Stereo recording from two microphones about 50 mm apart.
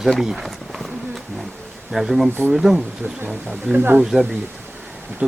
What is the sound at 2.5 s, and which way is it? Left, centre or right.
Speech, centre.